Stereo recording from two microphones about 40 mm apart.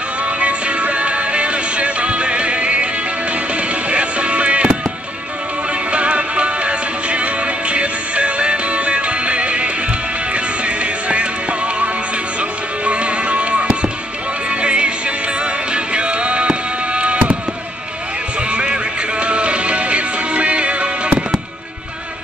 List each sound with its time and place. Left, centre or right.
0.2 s music: right
3.9 s music: right
5.9 s music: right
18.5 s music: right